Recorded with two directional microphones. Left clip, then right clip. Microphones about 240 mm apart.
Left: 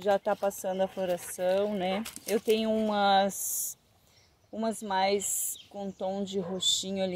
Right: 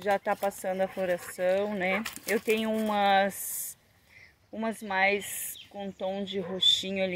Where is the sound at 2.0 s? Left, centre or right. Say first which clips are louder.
Right 4 dB; right.